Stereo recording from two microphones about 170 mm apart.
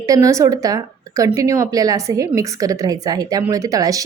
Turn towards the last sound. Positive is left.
turn(degrees=-20)  # may be behind; listen again after turning